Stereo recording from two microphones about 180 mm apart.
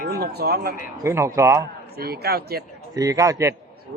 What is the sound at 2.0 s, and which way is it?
Speech, 60° right (ahead or behind).